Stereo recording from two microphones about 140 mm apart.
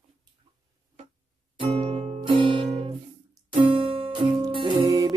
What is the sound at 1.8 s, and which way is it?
Music, 45° right (ahead or behind).